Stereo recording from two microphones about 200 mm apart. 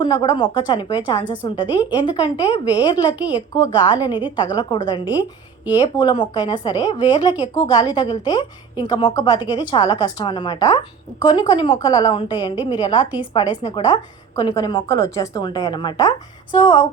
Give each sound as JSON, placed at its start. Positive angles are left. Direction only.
{"t": 0.0, "sound": "a woman's voice", "side_deg": 20}